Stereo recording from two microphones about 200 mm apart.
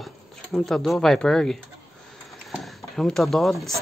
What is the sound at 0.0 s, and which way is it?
Speech, centre (ahead or behind).